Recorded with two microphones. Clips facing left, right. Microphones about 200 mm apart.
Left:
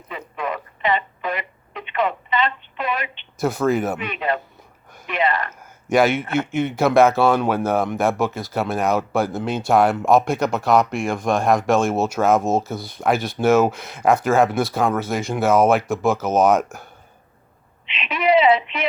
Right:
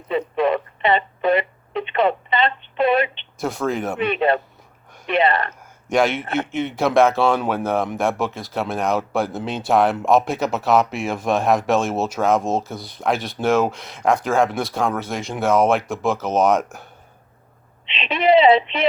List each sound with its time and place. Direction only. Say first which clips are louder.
0.3 s telephone: right 6 dB; 30° right (ahead or behind)
3.3 s speech: left 4 dB; centre (ahead or behind)
3.9 s speech: right 6 dB; 30° right (ahead or behind)
5.9 s speech: left 2 dB; 5° left (ahead or behind)
17.8 s a sound: right 2 dB; 30° right (ahead or behind)